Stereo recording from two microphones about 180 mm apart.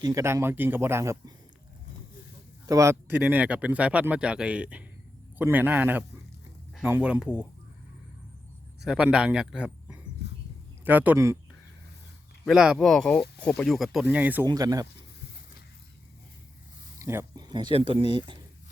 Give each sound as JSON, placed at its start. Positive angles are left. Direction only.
{"t": 0.0, "sound": "speech", "side_deg": -15}
{"t": 2.6, "sound": "speech", "side_deg": -15}
{"t": 8.8, "sound": "speech", "side_deg": -5}
{"t": 12.5, "sound": "speech", "side_deg": -5}
{"t": 14.4, "sound": "speech", "side_deg": -20}
{"t": 17.0, "sound": "speech", "side_deg": -15}
{"t": 17.5, "sound": "speech", "side_deg": -25}